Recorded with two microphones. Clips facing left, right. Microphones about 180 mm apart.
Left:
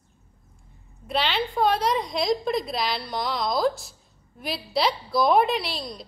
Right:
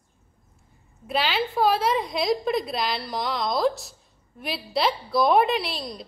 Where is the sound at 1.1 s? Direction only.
Centre (ahead or behind).